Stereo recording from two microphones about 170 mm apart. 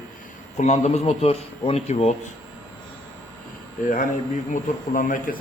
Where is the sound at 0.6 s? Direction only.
40° left (ahead or behind).